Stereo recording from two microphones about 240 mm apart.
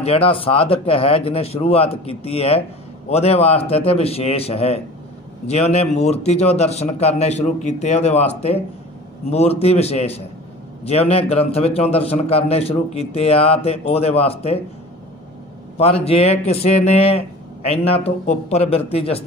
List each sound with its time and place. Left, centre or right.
0.0 s a man's voice: left
15.8 s a man's voice: left